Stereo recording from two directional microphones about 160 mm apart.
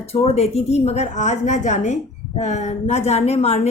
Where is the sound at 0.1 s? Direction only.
40° left (ahead or behind).